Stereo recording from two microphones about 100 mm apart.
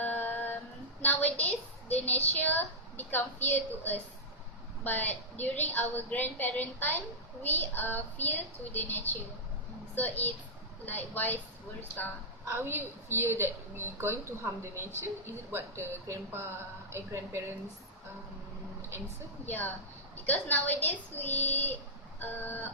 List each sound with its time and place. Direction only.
0.0 s a sound: 20° left (ahead or behind)
2.4 s a woman's voice: 15° left (ahead or behind)
12.5 s a woman's voice: 25° right (ahead or behind)
19.5 s a woman's voice: 20° left (ahead or behind)